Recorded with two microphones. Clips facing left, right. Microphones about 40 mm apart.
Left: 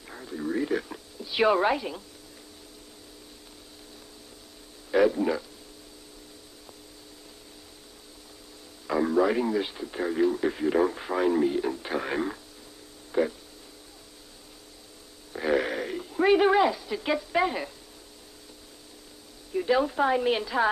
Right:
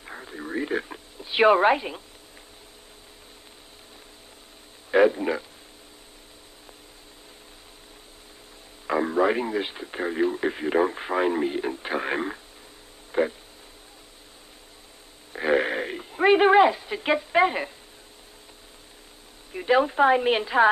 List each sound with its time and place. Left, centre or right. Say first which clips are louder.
0.0 s speech: left 2 dB; right
4.9 s speech: right 3 dB; right
8.8 s speech: right 1 dB; right
15.3 s speech: right 3 dB; right
19.5 s speech: right 3 dB; right